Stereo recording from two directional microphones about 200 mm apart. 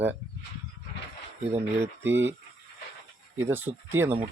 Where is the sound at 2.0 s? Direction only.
10° right (ahead or behind).